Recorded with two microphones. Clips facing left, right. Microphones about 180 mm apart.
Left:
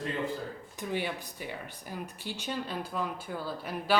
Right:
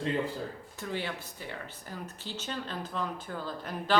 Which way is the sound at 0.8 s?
15° left (ahead or behind).